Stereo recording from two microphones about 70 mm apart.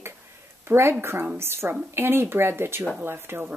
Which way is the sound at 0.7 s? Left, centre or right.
Right.